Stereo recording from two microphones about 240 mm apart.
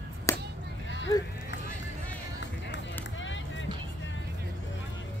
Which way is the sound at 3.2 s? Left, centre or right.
Left.